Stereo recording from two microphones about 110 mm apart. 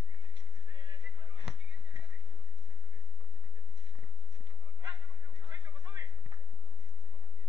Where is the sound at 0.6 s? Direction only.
50° right (ahead or behind).